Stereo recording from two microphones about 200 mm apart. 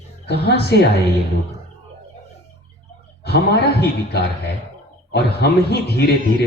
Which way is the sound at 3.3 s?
55° left (ahead or behind).